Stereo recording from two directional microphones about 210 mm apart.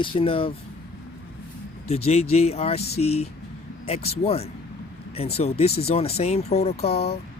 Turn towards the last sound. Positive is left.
turn(degrees=30)  # may be behind; listen again after turning